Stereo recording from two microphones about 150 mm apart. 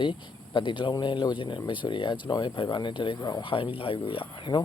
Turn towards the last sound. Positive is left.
turn(degrees=35)  # may be behind; listen again after turning